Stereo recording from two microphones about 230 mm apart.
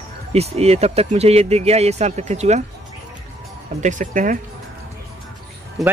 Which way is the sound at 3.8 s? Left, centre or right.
Right.